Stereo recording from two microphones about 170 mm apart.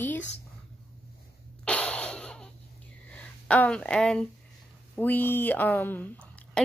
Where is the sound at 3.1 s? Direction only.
10° left (ahead or behind).